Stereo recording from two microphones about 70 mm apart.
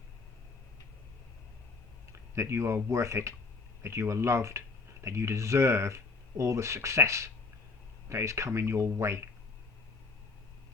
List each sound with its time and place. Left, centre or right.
2.3 s speech: right